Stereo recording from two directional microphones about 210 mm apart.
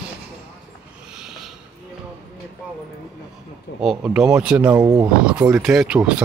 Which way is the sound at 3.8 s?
5° right (ahead or behind).